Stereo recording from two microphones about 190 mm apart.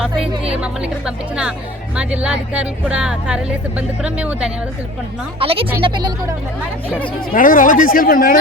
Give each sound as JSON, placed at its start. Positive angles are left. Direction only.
{"t": 0.6, "sound": "speech", "side_deg": -5}
{"t": 5.4, "sound": "speech", "side_deg": -30}
{"t": 7.3, "sound": "speech", "side_deg": 45}